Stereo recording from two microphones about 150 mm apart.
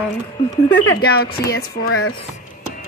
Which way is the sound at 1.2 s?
90° left.